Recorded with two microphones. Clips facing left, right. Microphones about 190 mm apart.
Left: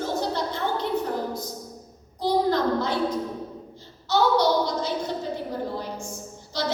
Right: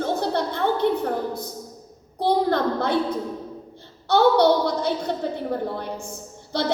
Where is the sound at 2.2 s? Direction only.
60° right (ahead or behind).